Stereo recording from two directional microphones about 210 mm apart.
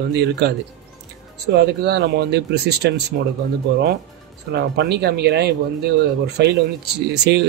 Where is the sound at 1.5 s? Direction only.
50° right (ahead or behind).